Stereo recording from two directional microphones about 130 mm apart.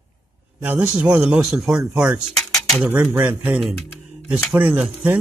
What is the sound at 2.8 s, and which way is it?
Speech, 10° right (ahead or behind).